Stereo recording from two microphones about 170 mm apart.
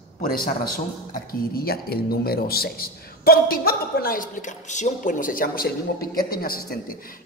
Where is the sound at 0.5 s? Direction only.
55° left (ahead or behind).